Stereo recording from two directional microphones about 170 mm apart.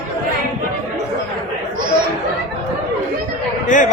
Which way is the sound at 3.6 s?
50° left (ahead or behind).